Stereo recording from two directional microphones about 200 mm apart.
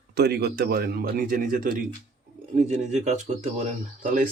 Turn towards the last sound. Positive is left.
turn(degrees=-40)  # may be behind; listen again after turning